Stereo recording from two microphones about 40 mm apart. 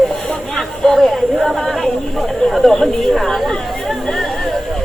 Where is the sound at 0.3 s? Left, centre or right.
Centre.